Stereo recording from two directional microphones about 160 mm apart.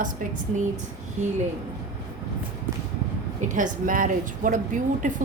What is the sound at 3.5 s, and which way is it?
A woman's voice, 55° right (ahead or behind).